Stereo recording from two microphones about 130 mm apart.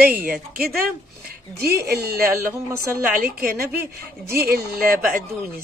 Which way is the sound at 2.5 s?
25° right (ahead or behind).